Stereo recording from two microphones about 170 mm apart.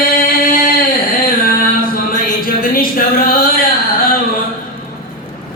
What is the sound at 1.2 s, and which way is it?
Music, 55° left (ahead or behind).